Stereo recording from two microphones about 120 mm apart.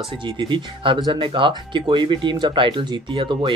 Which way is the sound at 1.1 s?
45° right (ahead or behind).